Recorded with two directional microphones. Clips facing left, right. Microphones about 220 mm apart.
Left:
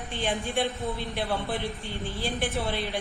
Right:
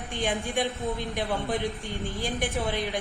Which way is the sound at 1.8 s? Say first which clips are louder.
Right 1 dB; 45° right (ahead or behind).